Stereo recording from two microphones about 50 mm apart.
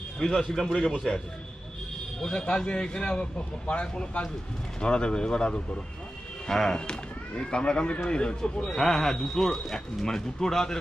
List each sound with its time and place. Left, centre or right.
0.2 s speech: centre
2.3 s speech: centre
8.7 s speech: centre